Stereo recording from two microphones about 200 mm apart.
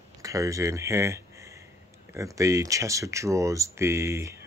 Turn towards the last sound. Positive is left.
turn(degrees=-15)  # may be behind; listen again after turning